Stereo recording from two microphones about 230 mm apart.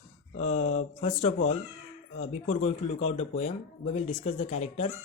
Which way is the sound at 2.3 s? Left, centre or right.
Left.